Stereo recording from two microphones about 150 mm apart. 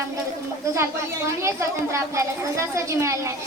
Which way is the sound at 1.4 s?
20° right (ahead or behind).